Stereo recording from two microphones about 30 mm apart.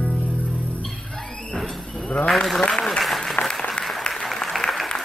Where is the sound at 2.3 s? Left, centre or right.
Centre.